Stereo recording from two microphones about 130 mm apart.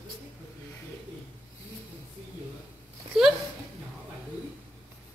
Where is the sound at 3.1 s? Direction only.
5° right (ahead or behind).